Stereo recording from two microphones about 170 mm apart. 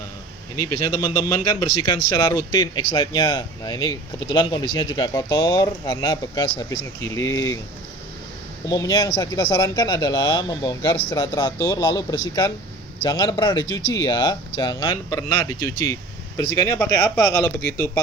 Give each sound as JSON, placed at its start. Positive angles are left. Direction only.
{"t": 0.9, "sound": "speech", "side_deg": 20}
{"t": 8.7, "sound": "speech", "side_deg": 20}